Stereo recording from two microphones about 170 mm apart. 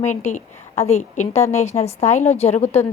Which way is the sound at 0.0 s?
45° left (ahead or behind).